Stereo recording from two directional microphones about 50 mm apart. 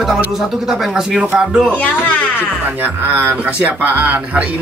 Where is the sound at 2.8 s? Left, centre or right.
Right.